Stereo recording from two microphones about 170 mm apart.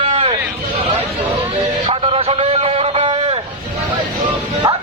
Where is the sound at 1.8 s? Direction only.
35° right (ahead or behind).